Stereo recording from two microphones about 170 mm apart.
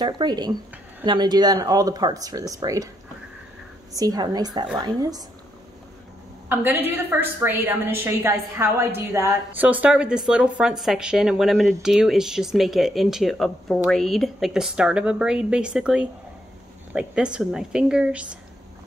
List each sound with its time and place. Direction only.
0.0 s speech: 25° right (ahead or behind)
3.9 s speech: 20° right (ahead or behind)
6.5 s a woman's voice: 10° right (ahead or behind)